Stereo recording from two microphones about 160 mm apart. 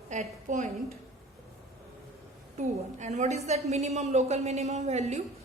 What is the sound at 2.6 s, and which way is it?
A woman's voice, 45° right (ahead or behind).